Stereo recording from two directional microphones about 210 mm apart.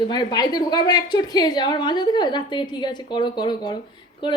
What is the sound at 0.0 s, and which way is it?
A woman's voice, 20° left (ahead or behind).